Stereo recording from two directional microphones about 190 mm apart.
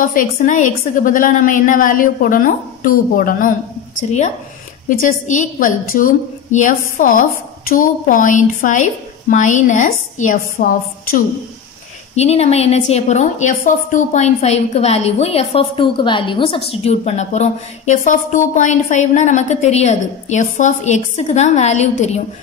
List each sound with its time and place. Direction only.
0.1 s a woman's voice: 45° left (ahead or behind)
4.8 s a woman's voice: 40° left (ahead or behind)
12.2 s a woman's voice: 35° left (ahead or behind)